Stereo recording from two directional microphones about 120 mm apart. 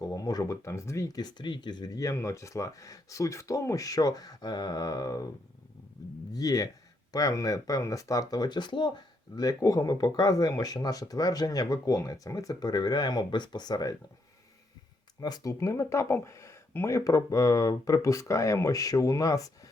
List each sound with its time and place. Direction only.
0.0 s speech: 30° left (ahead or behind)
6.3 s speech: 30° left (ahead or behind)
15.2 s speech: 30° left (ahead or behind)